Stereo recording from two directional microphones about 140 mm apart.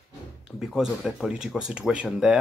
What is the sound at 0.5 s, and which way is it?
Speech, 5° right (ahead or behind).